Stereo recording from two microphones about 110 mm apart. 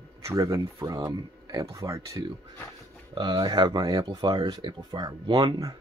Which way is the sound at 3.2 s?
40° right (ahead or behind).